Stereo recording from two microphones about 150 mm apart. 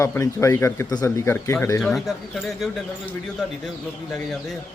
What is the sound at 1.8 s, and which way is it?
Speech, centre (ahead or behind).